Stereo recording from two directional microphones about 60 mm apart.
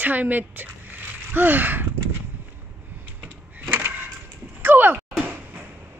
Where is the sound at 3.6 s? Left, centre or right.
Right.